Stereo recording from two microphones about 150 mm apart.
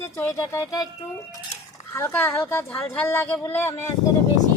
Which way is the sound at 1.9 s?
20° left (ahead or behind).